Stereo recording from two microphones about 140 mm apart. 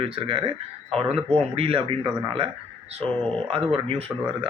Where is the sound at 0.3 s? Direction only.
40° right (ahead or behind).